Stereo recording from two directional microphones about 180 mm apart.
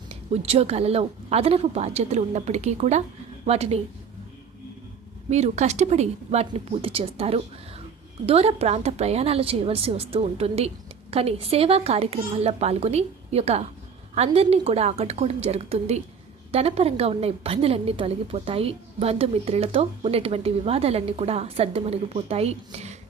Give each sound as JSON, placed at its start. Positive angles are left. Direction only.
{"t": 0.1, "sound": "a woman's voice", "side_deg": -35}
{"t": 5.3, "sound": "a woman's voice", "side_deg": -40}